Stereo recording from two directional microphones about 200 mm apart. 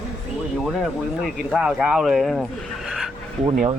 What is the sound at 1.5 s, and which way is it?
Speech, 5° right (ahead or behind).